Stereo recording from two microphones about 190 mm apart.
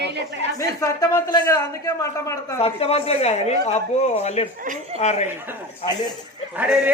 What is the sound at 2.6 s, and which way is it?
A woman's voice, 30° left (ahead or behind).